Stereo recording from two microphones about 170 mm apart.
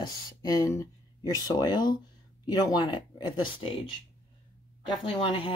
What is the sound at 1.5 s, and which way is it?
Speech, 25° left (ahead or behind).